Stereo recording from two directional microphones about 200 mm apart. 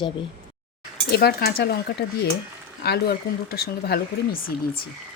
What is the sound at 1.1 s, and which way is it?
Speech, 55° left (ahead or behind).